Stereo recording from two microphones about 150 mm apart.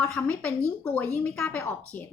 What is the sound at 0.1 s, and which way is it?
A woman's voice, 10° left (ahead or behind).